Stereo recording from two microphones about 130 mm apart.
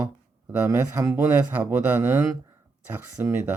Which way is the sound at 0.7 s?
25° right (ahead or behind).